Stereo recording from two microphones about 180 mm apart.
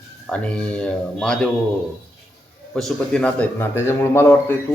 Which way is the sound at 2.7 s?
5° left (ahead or behind).